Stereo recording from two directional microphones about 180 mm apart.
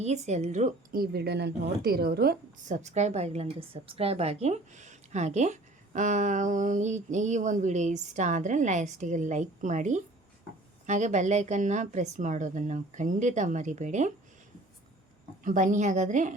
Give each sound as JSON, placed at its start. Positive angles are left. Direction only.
{"t": 0.0, "sound": "a woman's voice", "side_deg": -40}
{"t": 1.0, "sound": "a woman's voice", "side_deg": -60}
{"t": 2.6, "sound": "a woman's voice", "side_deg": -40}
{"t": 15.4, "sound": "a woman's voice", "side_deg": -45}